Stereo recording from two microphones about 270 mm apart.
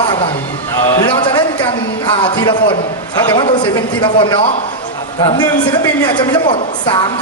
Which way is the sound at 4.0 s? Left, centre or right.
Centre.